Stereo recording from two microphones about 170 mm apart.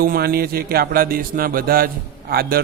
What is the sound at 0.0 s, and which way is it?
A man's voice, 60° right (ahead or behind).